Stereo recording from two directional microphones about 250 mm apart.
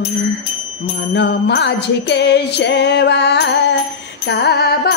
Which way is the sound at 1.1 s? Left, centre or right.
Left.